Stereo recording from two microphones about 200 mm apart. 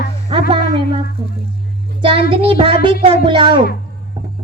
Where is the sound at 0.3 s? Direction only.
25° right (ahead or behind).